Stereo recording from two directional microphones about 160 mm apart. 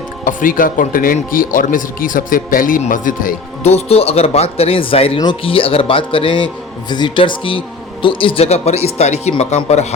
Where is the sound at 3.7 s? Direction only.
40° left (ahead or behind).